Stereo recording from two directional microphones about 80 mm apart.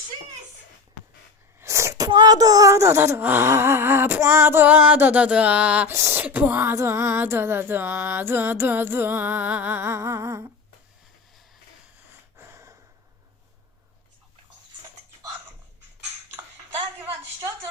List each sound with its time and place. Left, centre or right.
1.5 s sneeze: right
2.2 s speech: right
3.2 s music: right
3.4 s a sound: right
4.6 s music: right
5.9 s speech: right
6.2 s speech: right
6.7 s music: right